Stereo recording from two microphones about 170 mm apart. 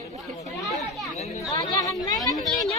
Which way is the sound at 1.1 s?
40° left (ahead or behind).